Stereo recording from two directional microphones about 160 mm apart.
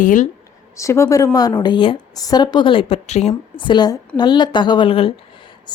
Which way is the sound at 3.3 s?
30° left (ahead or behind).